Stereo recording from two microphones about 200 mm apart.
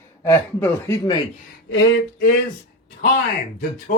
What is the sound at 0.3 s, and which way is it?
Speech, 10° left (ahead or behind).